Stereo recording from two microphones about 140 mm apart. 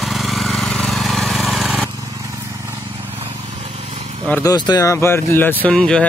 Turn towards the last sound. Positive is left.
turn(degrees=5)  # may be behind; listen again after turning